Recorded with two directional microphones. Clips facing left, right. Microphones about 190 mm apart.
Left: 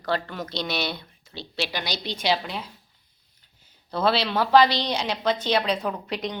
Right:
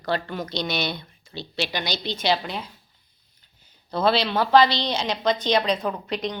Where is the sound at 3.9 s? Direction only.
5° left (ahead or behind).